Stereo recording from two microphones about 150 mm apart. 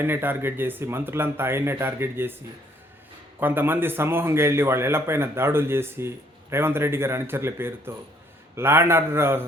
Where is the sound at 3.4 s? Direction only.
15° right (ahead or behind).